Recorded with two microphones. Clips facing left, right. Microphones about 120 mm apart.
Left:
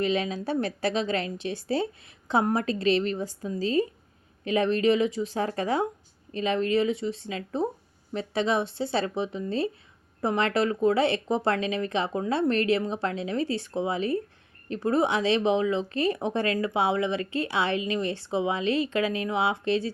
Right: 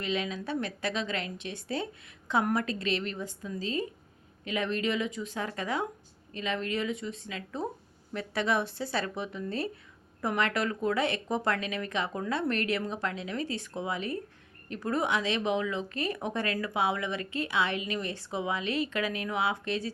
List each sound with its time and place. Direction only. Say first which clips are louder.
0.0 s a woman's voice: left 6 dB; 35° left (ahead or behind)